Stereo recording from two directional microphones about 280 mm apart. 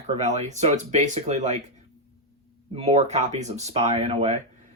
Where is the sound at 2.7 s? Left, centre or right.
Right.